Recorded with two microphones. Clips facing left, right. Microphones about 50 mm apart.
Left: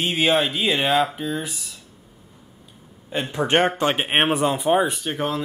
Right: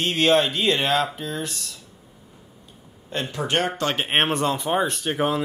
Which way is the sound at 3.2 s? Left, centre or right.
Left.